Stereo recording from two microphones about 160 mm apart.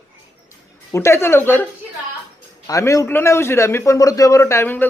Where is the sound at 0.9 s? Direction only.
15° left (ahead or behind).